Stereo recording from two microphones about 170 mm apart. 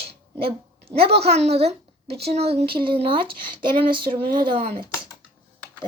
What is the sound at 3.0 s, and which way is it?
Speech, 30° right (ahead or behind).